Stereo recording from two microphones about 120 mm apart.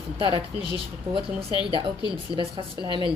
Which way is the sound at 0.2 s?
40° right (ahead or behind).